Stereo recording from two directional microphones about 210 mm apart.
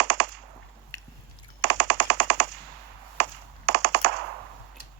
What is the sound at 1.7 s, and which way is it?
Machine gun, 55° right (ahead or behind).